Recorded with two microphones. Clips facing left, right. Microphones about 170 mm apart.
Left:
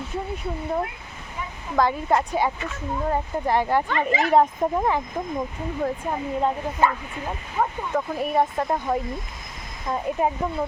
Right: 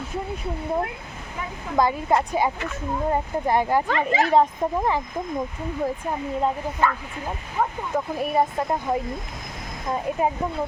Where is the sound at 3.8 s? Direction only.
40° right (ahead or behind).